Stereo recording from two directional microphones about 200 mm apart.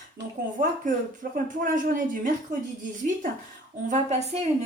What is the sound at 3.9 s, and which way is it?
Speech, 35° right (ahead or behind).